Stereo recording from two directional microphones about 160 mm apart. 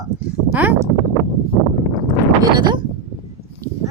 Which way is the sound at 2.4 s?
30° right (ahead or behind).